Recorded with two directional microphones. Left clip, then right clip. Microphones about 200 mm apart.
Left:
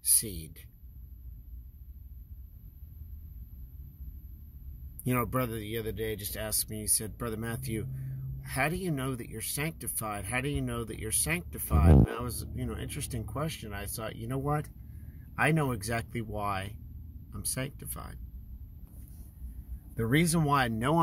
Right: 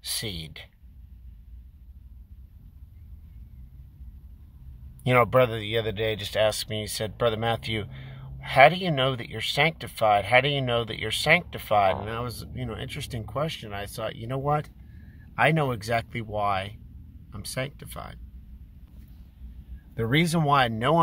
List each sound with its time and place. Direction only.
5.0 s speech: 10° right (ahead or behind)
20.0 s speech: 15° right (ahead or behind)